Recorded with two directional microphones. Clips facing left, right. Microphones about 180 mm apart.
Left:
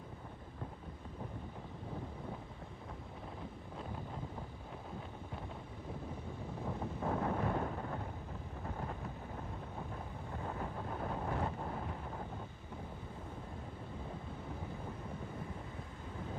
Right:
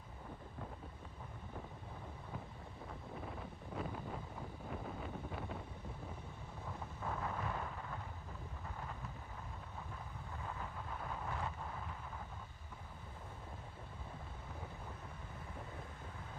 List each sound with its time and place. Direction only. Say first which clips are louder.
7.0 s wind noise: left 7 dB; 35° left (ahead or behind)
10.4 s wind noise: left 6 dB; 35° left (ahead or behind)